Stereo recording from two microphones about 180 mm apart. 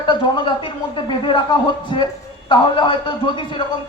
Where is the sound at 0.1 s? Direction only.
25° left (ahead or behind).